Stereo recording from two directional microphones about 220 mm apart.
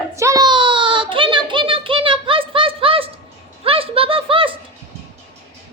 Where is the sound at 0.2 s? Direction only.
15° right (ahead or behind).